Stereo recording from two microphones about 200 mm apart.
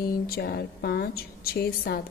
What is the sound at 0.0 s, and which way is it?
A woman's voice, 50° left (ahead or behind).